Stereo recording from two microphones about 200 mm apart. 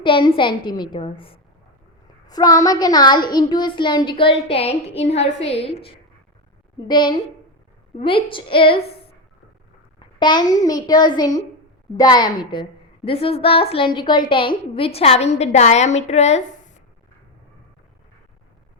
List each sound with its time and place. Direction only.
0.0 s a child's voice: 25° left (ahead or behind)
6.8 s a child's voice: 20° left (ahead or behind)
10.0 s a sound: 20° left (ahead or behind)
10.6 s a child's voice: 20° left (ahead or behind); by 16.4 s 35° left (ahead or behind)